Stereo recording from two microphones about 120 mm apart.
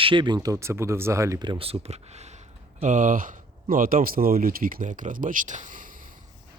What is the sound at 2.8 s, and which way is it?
Speech, 90° right.